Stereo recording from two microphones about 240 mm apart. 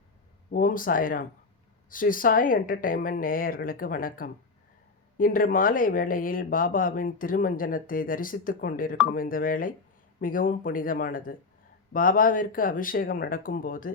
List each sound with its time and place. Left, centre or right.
0.5 s speech: left